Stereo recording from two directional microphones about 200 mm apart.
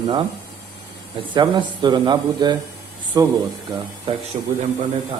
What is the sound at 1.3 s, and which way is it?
Speech, 25° right (ahead or behind).